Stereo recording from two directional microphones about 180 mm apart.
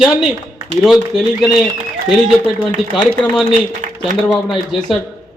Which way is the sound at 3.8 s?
45° right (ahead or behind).